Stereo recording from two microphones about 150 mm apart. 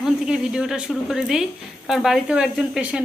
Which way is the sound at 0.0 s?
5° right (ahead or behind).